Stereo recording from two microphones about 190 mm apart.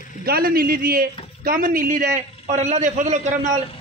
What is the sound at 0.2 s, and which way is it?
A man's voice, 55° right (ahead or behind).